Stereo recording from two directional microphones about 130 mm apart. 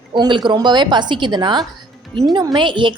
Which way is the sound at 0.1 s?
35° right (ahead or behind).